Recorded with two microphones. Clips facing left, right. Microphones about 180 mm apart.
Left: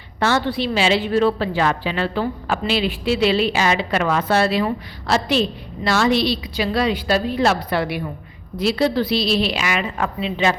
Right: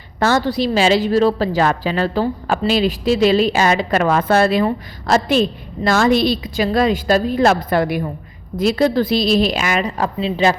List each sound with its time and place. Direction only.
0.2 s a woman's voice: 40° right (ahead or behind)